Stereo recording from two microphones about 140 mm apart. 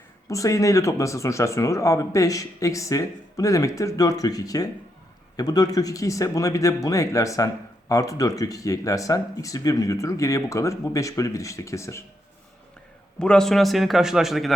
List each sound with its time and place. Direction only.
0.3 s speech: 25° left (ahead or behind)
13.1 s a man's voice: 5° left (ahead or behind)